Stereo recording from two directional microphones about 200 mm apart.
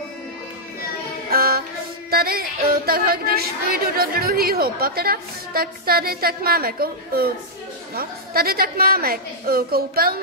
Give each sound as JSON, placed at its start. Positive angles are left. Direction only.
{"t": 1.3, "sound": "music", "side_deg": -50}
{"t": 2.9, "sound": "a woman's voice", "side_deg": -50}